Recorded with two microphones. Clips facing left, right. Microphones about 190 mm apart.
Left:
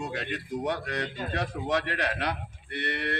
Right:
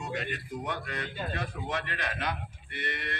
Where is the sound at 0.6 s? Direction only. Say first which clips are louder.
Left 7 dB; 75° left (ahead or behind).